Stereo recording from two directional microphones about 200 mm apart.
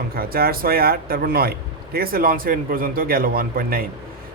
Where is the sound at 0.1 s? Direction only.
50° right (ahead or behind).